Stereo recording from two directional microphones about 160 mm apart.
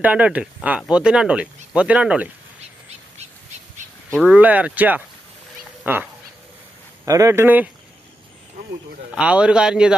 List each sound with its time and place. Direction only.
0.0 s speech: 10° right (ahead or behind)
4.3 s speech: 10° right (ahead or behind)
9.1 s a man's voice: 5° right (ahead or behind)